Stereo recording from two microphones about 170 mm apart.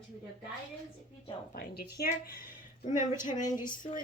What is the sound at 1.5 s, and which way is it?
Speech, 65° left (ahead or behind).